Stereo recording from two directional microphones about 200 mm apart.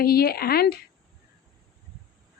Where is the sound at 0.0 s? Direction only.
50° left (ahead or behind).